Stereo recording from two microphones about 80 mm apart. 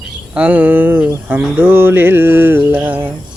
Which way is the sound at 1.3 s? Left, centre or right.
Right.